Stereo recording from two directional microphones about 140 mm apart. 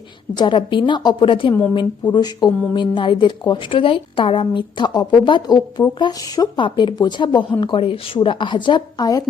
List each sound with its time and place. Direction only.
0.3 s a woman's voice: 35° left (ahead or behind)